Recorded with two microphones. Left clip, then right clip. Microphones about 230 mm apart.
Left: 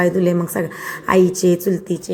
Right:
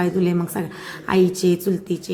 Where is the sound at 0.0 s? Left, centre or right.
Centre.